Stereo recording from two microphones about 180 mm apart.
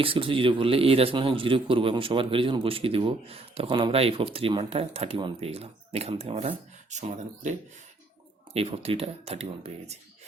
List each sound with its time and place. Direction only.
0.0 s a man's voice: 30° right (ahead or behind)
8.5 s a man's voice: 35° right (ahead or behind)